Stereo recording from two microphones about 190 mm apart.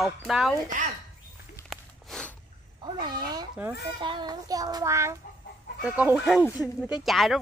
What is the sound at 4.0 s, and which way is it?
Child singing, 25° right (ahead or behind).